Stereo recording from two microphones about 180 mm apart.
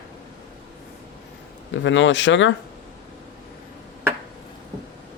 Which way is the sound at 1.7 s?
90° left.